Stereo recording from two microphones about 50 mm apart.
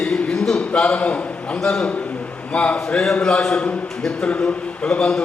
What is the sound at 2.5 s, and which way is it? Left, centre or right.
A man's voice, left.